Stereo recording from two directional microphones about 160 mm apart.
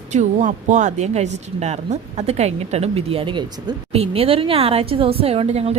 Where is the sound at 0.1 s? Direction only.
50° right (ahead or behind).